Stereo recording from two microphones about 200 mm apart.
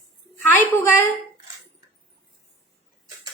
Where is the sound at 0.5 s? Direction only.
10° left (ahead or behind).